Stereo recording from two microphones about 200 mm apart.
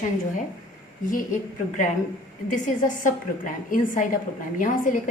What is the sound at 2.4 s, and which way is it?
A woman's voice, 40° left (ahead or behind).